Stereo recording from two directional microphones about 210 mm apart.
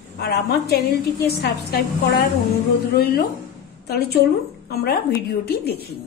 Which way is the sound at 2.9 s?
50° left (ahead or behind).